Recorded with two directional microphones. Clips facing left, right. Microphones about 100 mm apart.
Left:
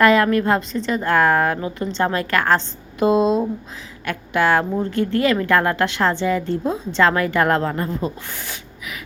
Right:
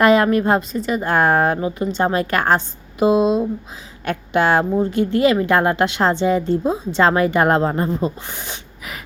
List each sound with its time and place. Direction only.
0.0 s a woman's voice: 20° right (ahead or behind)
4.0 s a woman's voice: 25° right (ahead or behind)